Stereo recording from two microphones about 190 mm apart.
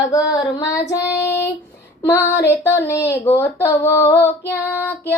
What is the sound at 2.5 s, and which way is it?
Female singing, 15° left (ahead or behind).